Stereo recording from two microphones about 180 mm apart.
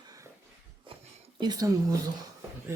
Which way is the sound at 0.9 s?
30° right (ahead or behind).